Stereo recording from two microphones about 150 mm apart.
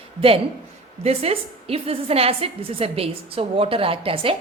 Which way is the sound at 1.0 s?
40° right (ahead or behind).